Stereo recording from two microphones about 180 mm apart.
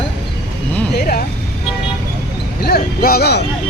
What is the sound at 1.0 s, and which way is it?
Speech, 55° left (ahead or behind).